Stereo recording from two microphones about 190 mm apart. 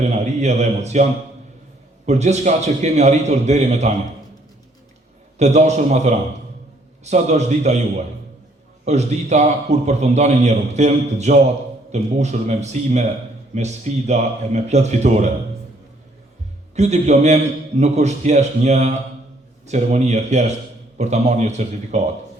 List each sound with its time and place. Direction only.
0.0 s a man's voice: 35° right (ahead or behind)
2.0 s a man's voice: 35° right (ahead or behind)
5.4 s a man's voice: 35° right (ahead or behind)
16.7 s a man's voice: 35° right (ahead or behind)